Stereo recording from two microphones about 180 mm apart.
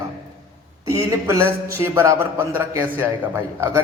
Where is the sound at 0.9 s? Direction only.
15° right (ahead or behind).